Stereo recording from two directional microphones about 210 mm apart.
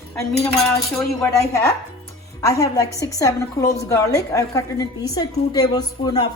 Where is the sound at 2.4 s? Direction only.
15° left (ahead or behind).